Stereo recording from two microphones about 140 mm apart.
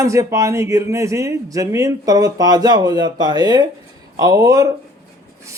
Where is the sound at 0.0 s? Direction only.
20° right (ahead or behind).